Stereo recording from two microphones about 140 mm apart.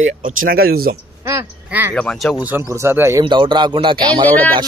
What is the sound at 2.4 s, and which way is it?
Speech, 15° right (ahead or behind).